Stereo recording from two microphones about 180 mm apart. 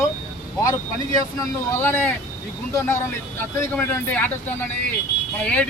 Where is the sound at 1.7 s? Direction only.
10° left (ahead or behind).